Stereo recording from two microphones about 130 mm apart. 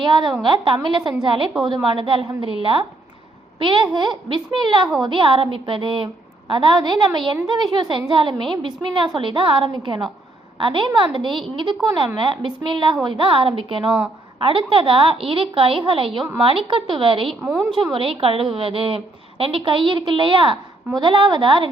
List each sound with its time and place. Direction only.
0.0 s a woman's voice: 35° right (ahead or behind)
3.6 s a woman's voice: 40° right (ahead or behind)